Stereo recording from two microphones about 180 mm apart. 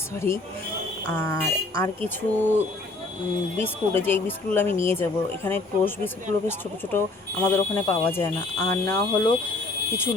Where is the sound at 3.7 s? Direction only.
10° left (ahead or behind).